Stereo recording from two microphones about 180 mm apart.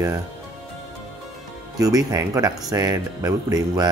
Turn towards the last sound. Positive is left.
turn(degrees=-20)  # may be behind; listen again after turning